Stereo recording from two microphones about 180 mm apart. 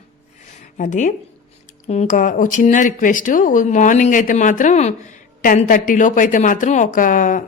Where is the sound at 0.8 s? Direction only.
45° left (ahead or behind).